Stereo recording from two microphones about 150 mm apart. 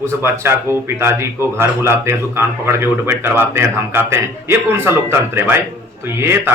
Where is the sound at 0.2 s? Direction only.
15° right (ahead or behind).